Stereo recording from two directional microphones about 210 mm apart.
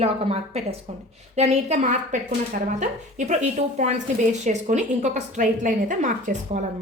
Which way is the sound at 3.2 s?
35° right (ahead or behind).